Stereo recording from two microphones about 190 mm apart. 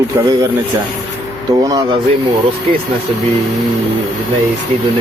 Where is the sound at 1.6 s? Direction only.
20° right (ahead or behind).